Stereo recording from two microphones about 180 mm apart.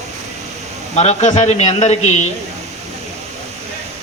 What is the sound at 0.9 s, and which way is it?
Speech, 40° left (ahead or behind).